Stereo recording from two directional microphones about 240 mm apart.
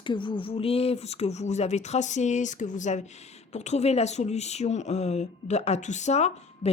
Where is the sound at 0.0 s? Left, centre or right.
Centre.